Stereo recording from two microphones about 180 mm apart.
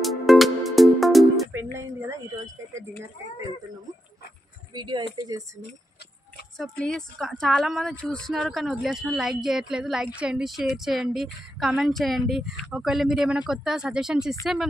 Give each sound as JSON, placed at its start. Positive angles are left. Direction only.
{"t": 0.0, "sound": "music", "side_deg": 0}
{"t": 1.5, "sound": "speech", "side_deg": -10}
{"t": 4.7, "sound": "speech", "side_deg": -25}
{"t": 6.6, "sound": "a woman's voice", "side_deg": 5}